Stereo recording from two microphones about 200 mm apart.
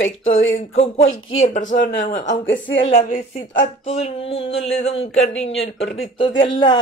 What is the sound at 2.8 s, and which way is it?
Speech, 35° left (ahead or behind).